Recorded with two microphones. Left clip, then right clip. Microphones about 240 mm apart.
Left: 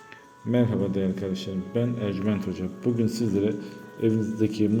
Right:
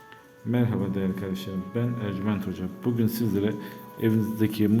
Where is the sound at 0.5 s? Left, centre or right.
Centre.